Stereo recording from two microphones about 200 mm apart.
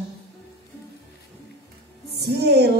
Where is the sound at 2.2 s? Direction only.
55° right (ahead or behind).